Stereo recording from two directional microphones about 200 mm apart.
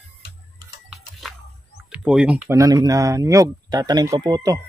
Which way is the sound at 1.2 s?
Centre (ahead or behind).